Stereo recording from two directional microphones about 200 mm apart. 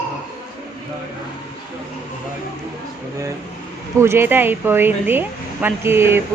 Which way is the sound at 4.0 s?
10° right (ahead or behind).